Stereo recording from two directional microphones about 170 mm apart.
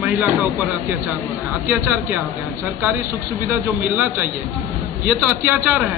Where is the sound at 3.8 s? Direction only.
10° right (ahead or behind).